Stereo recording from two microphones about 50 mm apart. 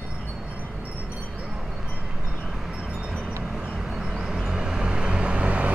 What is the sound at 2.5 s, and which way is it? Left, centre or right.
Vehicle, centre.